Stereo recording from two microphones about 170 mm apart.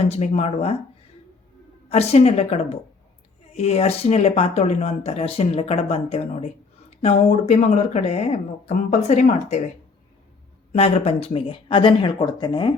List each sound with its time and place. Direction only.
0.0 s speech: 40° left (ahead or behind)
1.9 s speech: 40° left (ahead or behind)
10.7 s speech: 35° left (ahead or behind)